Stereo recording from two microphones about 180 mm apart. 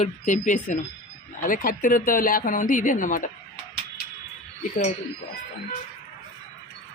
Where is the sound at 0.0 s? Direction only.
45° left (ahead or behind).